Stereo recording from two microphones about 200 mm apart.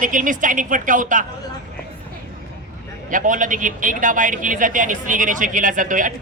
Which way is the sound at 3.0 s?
40° right (ahead or behind).